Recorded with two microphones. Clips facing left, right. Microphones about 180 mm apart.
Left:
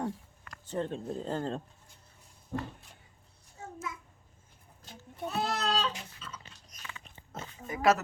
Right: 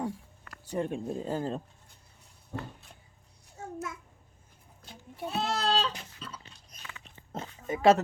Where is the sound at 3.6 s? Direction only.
45° right (ahead or behind).